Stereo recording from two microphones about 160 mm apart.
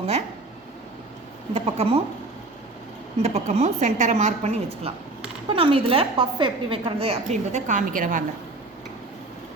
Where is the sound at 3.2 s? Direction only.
45° right (ahead or behind).